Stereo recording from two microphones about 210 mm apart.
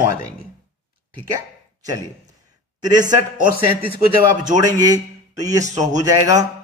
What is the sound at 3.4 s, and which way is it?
Speech, 45° right (ahead or behind).